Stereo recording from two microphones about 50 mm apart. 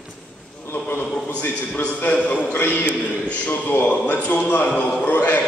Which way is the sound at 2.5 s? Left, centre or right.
Left.